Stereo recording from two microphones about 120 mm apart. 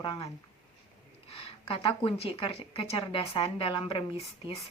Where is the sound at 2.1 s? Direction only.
50° left (ahead or behind).